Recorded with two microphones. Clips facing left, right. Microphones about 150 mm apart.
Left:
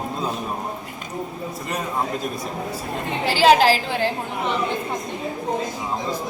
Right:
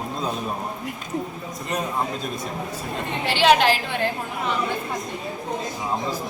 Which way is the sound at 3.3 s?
35° left (ahead or behind).